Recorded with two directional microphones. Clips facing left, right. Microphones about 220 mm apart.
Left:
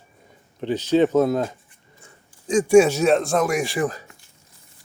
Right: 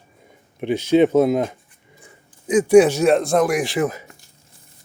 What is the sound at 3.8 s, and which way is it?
Speech, 20° right (ahead or behind).